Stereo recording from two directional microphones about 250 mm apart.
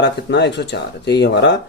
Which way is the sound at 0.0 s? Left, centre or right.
Left.